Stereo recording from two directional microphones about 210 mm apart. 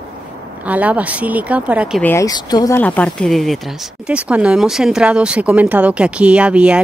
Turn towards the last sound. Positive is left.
turn(degrees=-5)  # may be behind; listen again after turning